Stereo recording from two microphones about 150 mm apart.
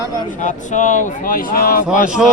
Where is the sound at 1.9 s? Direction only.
55° left (ahead or behind).